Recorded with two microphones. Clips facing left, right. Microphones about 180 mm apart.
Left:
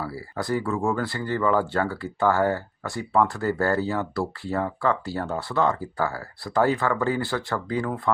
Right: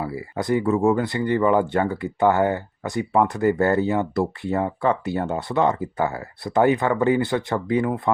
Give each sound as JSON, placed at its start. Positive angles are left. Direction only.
{"t": 0.0, "sound": "speech", "side_deg": -20}